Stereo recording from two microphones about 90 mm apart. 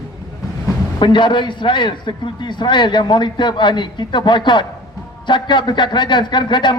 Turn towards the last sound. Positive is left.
turn(degrees=60)  # may be behind; listen again after turning